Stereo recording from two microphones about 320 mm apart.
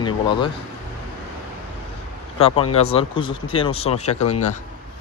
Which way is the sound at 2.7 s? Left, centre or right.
Centre.